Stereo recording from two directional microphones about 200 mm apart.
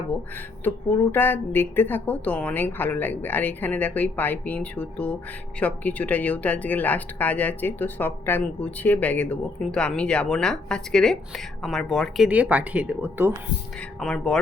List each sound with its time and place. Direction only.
0.6 s speech: 10° left (ahead or behind); by 13.3 s 10° right (ahead or behind)
14.0 s speech: 5° left (ahead or behind)